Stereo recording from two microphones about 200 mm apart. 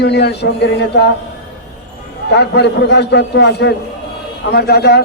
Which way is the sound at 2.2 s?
55° left (ahead or behind).